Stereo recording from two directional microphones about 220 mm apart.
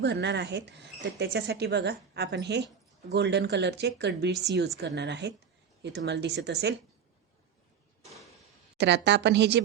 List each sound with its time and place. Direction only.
0.0 s speech: 50° right (ahead or behind)
8.0 s a sound: centre (ahead or behind)
8.8 s speech: 50° right (ahead or behind)